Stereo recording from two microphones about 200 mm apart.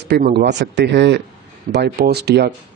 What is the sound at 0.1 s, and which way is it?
Speech, 55° right (ahead or behind).